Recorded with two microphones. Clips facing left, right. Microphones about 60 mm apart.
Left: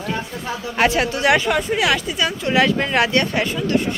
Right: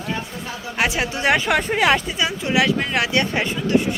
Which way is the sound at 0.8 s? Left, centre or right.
Centre.